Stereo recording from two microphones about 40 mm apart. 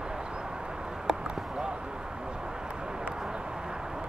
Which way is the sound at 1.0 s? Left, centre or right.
Centre.